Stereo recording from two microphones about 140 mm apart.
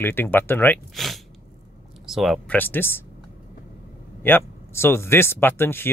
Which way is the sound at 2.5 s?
15° left (ahead or behind).